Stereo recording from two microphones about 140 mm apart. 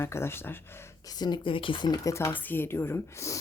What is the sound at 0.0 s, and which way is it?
Speech, 20° left (ahead or behind).